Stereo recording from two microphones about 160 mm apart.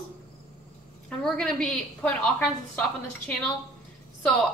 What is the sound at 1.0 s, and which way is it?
A woman's voice, 5° left (ahead or behind).